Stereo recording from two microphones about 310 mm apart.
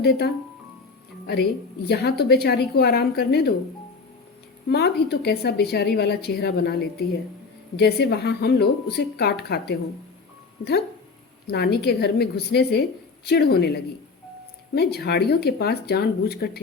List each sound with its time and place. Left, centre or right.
0.0 s a woman's voice: left
1.3 s a woman's voice: left
4.7 s a woman's voice: left
11.4 s a woman's voice: left